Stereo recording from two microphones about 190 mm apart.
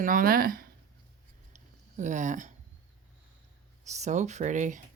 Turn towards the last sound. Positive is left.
turn(degrees=-40)  # may be behind; listen again after turning